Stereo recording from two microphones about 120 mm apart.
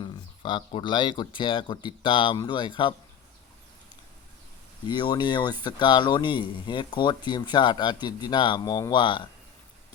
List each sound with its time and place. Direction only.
0.0 s speech: 45° left (ahead or behind)
4.9 s speech: 40° left (ahead or behind)